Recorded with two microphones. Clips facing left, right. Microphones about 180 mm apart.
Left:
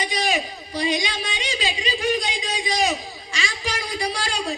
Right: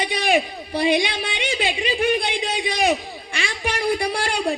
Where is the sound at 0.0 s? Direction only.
60° right (ahead or behind).